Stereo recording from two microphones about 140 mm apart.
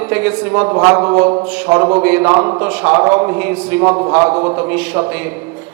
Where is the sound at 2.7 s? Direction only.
15° right (ahead or behind).